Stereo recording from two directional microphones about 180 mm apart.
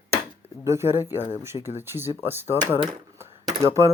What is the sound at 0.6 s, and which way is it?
Speech, 15° right (ahead or behind).